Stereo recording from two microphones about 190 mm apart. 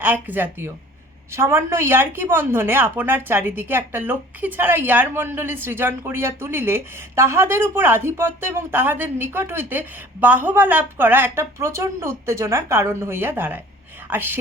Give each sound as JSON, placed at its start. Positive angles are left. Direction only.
{"t": 0.0, "sound": "a woman's voice", "side_deg": -10}